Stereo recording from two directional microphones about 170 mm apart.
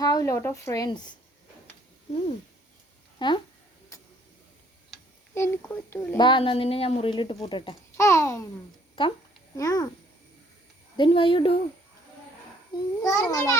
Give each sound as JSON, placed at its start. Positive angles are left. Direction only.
{"t": 0.0, "sound": "a woman's voice", "side_deg": 20}
{"t": 3.2, "sound": "speech", "side_deg": 25}
{"t": 5.3, "sound": "speech", "side_deg": 15}
{"t": 6.1, "sound": "a woman's voice", "side_deg": 30}
{"t": 7.9, "sound": "speech", "side_deg": 15}
{"t": 9.0, "sound": "a woman's voice", "side_deg": 30}
{"t": 10.9, "sound": "speech", "side_deg": 30}
{"t": 12.7, "sound": "a woman's voice", "side_deg": 20}